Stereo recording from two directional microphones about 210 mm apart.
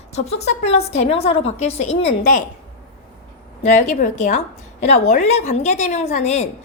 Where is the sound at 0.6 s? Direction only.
30° left (ahead or behind).